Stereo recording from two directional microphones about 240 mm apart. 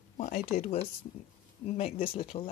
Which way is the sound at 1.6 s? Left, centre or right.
Left.